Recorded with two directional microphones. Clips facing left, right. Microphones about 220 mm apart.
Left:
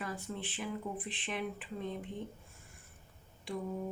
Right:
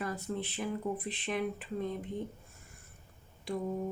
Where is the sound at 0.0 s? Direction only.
40° right (ahead or behind).